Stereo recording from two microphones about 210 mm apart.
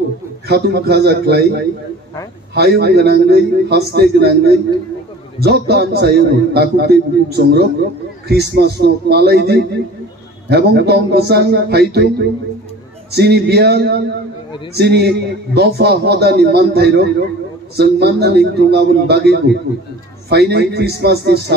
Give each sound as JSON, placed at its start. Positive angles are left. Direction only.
{"t": 0.5, "sound": "a man's voice", "side_deg": -50}